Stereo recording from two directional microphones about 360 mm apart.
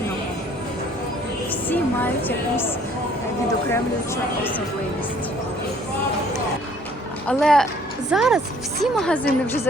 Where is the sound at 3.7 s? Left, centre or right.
Centre.